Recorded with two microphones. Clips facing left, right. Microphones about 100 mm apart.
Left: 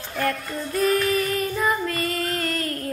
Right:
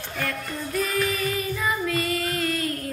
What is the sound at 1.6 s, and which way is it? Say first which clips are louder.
Child singing: left 1 dB; 45° left (ahead or behind).